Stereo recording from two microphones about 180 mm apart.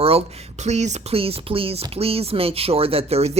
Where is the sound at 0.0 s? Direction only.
35° right (ahead or behind).